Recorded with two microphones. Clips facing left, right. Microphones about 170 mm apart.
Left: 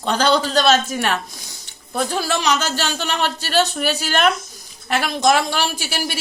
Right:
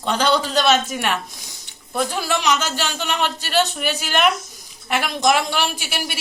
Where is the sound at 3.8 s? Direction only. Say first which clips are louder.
Left 3 dB; 40° left (ahead or behind).